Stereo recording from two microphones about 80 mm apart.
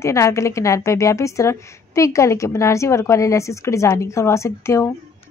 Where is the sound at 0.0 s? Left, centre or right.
Left.